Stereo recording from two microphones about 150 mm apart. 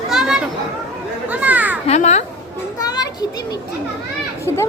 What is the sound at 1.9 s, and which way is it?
Babbling, 50° left (ahead or behind).